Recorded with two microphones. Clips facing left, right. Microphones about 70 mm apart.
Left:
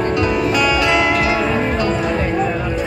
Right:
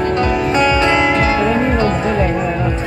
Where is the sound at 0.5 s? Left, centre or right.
Right.